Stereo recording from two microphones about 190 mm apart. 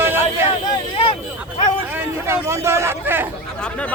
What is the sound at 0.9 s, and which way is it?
Speech, 30° left (ahead or behind).